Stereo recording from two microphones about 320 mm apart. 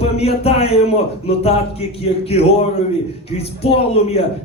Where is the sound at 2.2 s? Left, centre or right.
Centre.